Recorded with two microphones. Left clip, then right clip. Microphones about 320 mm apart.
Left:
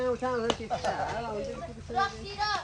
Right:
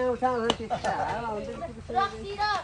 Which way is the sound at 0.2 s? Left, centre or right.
Centre.